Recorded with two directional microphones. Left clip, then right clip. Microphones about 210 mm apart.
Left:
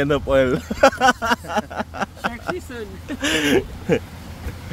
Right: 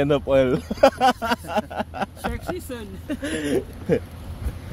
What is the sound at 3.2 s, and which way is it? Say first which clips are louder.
Speech: left 7 dB; 20° left (ahead or behind).